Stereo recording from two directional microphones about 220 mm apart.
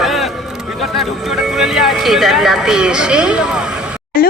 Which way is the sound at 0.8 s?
Centre (ahead or behind).